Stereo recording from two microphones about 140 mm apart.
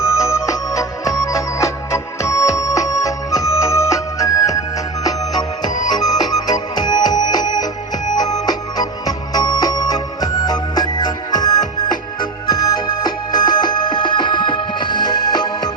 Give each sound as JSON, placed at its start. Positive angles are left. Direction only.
{"t": 0.0, "sound": "music", "side_deg": 20}